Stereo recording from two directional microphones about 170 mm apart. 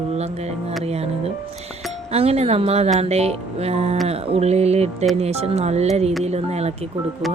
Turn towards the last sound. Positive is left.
turn(degrees=-40)  # may be behind; listen again after turning